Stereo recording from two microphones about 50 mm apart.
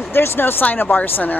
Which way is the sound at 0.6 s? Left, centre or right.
Left.